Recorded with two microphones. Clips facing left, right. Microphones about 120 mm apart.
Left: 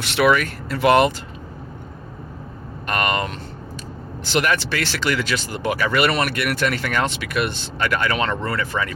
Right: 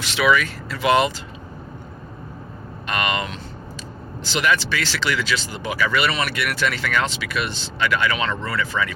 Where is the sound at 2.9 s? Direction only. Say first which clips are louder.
Left 2 dB; 45° left (ahead or behind).